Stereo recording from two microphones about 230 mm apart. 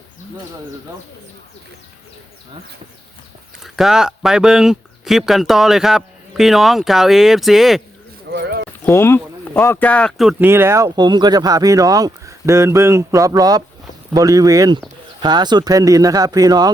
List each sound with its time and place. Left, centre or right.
3.6 s speech: centre
8.3 s clip-clop: right
8.8 s speech: centre